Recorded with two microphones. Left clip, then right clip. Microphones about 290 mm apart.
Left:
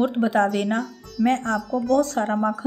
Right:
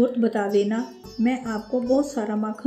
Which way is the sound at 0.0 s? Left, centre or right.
Left.